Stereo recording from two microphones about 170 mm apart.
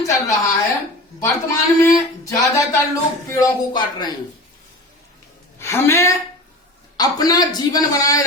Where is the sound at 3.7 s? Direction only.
25° left (ahead or behind).